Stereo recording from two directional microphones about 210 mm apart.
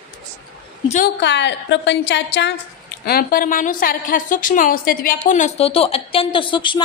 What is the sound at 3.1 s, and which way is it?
A woman's voice, 45° left (ahead or behind).